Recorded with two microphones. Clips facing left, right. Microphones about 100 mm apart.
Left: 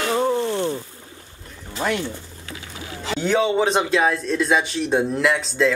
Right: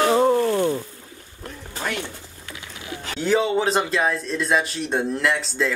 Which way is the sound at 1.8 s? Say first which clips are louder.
Left 5 dB; 50° left (ahead or behind).